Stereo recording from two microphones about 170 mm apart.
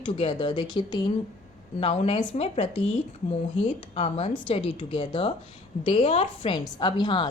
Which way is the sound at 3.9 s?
35° left (ahead or behind).